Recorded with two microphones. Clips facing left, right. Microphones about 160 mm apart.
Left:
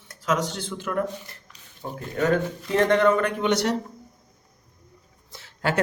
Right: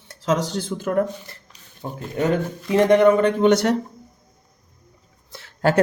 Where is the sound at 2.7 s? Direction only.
15° right (ahead or behind).